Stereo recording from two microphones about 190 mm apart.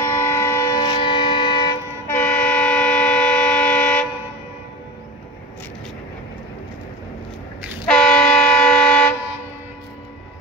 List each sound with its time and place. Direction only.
0.0 s vehicle: 15° left (ahead or behind)
2.1 s vehicle: 10° left (ahead or behind)
7.8 s vehicle: 5° left (ahead or behind)